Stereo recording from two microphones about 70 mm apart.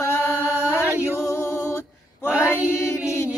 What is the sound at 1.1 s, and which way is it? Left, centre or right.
A capella, left.